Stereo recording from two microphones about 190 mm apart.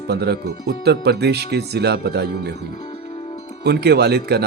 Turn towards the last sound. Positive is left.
turn(degrees=-60)  # may be behind; listen again after turning